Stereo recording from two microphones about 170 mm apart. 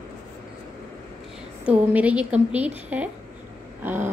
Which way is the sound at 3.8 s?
10° right (ahead or behind).